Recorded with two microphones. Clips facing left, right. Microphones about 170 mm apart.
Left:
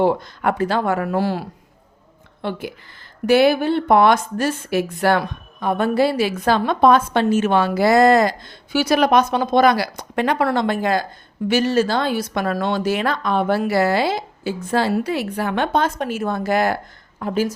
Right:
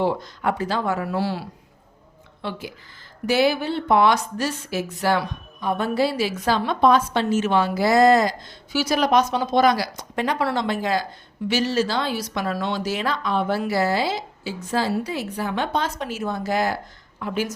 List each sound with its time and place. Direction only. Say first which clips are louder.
0.0 s a woman's voice: left 4 dB; 55° left (ahead or behind)
17.2 s speech: left 5 dB; 40° left (ahead or behind)